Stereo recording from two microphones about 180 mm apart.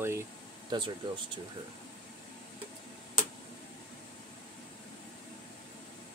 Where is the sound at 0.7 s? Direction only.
25° right (ahead or behind).